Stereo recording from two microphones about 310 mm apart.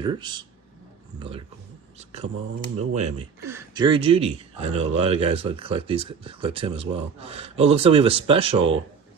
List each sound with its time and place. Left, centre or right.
0.0 s speech: centre
2.9 s speech: right
3.4 s speech: centre